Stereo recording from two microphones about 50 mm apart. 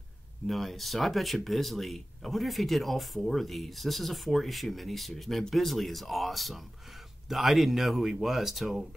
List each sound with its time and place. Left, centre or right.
0.5 s speech: centre